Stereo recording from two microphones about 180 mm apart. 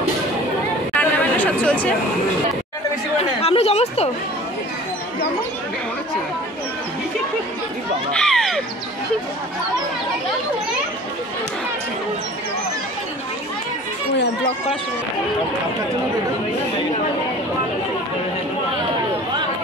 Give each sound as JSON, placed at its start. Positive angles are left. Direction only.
{"t": 0.9, "sound": "chatter", "side_deg": 10}
{"t": 3.2, "sound": "chatter", "side_deg": 35}
{"t": 8.2, "sound": "crow", "side_deg": 5}